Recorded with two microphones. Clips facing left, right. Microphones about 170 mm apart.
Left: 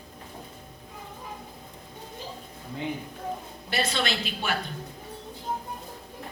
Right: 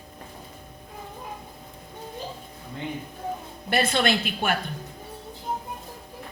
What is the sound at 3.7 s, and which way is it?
Speech, 55° right (ahead or behind).